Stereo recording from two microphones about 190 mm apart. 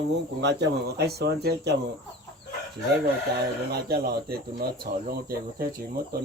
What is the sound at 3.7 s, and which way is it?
Speech, 55° right (ahead or behind).